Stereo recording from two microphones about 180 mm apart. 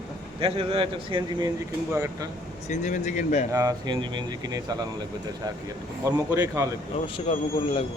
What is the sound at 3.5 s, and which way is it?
A man's voice, 20° right (ahead or behind).